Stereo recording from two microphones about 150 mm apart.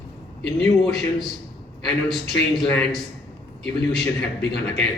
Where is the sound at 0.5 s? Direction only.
Centre (ahead or behind).